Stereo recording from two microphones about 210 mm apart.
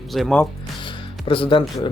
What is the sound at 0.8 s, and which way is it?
Music, 25° left (ahead or behind).